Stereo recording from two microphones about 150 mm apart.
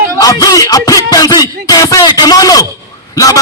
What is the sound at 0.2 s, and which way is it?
Music, 25° left (ahead or behind).